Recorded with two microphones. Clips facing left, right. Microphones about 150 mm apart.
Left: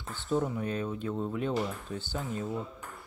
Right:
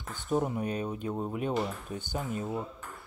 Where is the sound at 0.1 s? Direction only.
15° right (ahead or behind).